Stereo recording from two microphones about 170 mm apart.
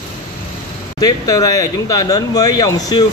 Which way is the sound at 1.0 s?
20° left (ahead or behind).